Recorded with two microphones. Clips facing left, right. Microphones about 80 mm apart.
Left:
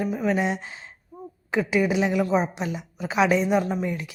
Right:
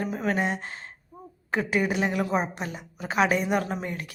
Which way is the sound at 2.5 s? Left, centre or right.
Right.